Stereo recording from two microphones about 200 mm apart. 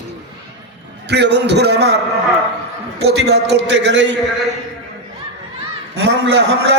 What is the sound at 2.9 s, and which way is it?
A man's voice, 55° right (ahead or behind).